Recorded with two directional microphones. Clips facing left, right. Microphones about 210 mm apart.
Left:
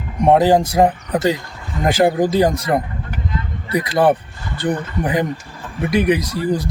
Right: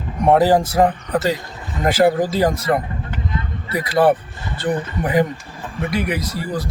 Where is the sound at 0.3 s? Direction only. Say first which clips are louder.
Left 1 dB; 20° left (ahead or behind).